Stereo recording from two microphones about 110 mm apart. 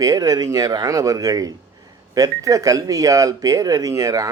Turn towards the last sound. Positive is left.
turn(degrees=-30)  # may be behind; listen again after turning